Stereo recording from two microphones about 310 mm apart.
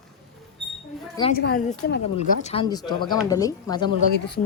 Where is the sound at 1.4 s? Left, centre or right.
Left.